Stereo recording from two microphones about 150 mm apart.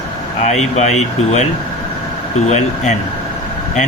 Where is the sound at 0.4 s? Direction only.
50° left (ahead or behind).